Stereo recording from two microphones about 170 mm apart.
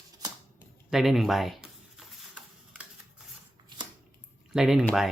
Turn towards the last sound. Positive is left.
turn(degrees=-5)  # may be behind; listen again after turning